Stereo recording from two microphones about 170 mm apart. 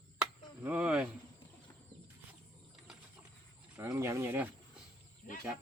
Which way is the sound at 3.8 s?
15° right (ahead or behind).